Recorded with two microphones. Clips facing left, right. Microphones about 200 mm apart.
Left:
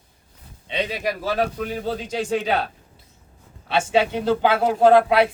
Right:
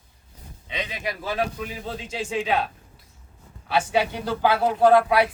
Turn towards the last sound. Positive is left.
turn(degrees=25)  # may be behind; listen again after turning